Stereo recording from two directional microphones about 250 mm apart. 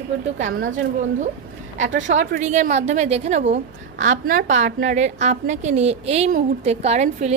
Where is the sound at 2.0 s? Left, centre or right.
Right.